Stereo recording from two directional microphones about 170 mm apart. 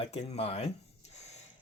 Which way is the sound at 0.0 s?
40° left (ahead or behind).